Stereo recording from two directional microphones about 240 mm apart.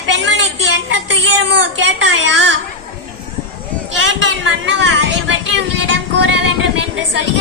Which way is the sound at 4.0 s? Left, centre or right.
Right.